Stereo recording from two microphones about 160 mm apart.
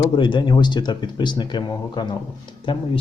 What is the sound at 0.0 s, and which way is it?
A man's voice, 30° left (ahead or behind).